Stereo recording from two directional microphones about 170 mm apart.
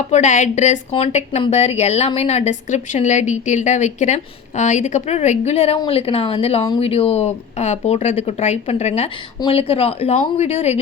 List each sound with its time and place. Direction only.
0.1 s speech: 45° left (ahead or behind)